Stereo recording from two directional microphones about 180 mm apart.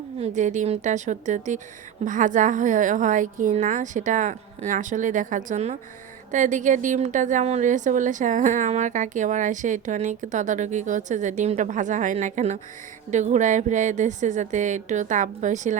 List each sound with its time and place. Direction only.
0.2 s a woman's voice: 45° right (ahead or behind)